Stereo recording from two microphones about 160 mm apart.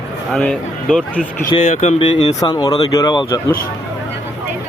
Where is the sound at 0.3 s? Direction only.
Centre (ahead or behind).